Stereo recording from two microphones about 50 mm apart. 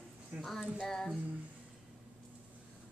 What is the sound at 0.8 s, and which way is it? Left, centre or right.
Speech, centre.